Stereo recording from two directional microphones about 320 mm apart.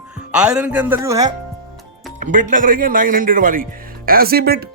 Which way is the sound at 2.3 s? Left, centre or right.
Right.